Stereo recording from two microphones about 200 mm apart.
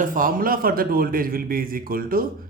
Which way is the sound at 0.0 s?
40° right (ahead or behind).